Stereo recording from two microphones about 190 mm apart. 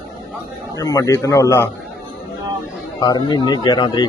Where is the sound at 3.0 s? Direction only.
20° left (ahead or behind).